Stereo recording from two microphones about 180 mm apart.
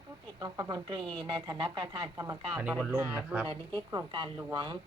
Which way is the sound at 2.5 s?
5° right (ahead or behind).